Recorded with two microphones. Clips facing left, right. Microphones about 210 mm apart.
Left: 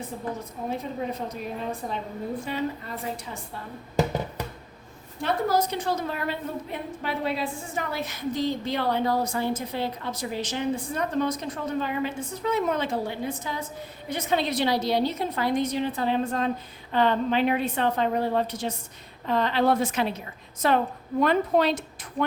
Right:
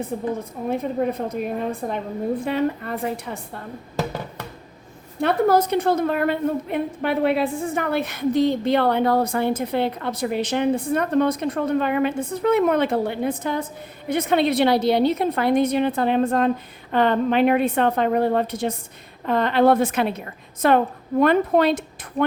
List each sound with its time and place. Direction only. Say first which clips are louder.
0.1 s a woman's voice: right 7 dB; 60° right (ahead or behind)
5.2 s a woman's voice: right 6 dB; 60° right (ahead or behind)